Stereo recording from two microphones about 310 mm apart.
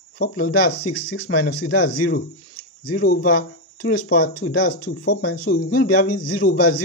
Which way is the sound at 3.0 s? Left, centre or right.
Left.